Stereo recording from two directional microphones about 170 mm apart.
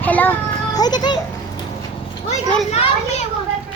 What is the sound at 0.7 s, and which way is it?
Speech, 25° left (ahead or behind).